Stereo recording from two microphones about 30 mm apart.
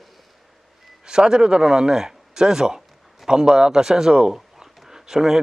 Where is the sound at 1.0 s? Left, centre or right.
Right.